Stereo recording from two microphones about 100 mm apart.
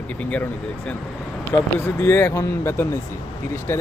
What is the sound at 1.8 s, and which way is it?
Speech, 20° left (ahead or behind).